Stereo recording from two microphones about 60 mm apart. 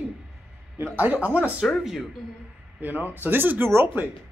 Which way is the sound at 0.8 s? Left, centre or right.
Right.